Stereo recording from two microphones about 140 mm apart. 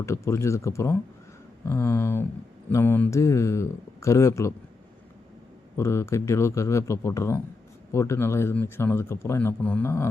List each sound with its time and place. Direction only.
0.0 s speech: 20° left (ahead or behind)
5.7 s speech: 20° left (ahead or behind)